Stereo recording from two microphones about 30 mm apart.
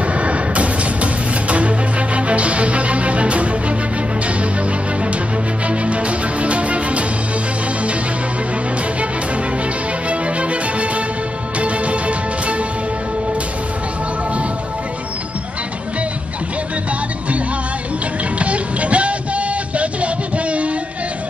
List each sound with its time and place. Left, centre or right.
0.1 s music: right
5.7 s music: right
10.0 s music: right
18.4 s music: right